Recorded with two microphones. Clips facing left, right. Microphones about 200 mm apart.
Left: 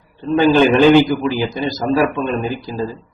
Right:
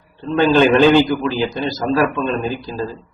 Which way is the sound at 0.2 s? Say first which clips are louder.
Left 1 dB; 15° left (ahead or behind).